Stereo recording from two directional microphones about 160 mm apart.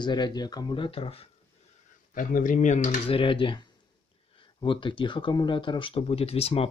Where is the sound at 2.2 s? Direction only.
55° left (ahead or behind).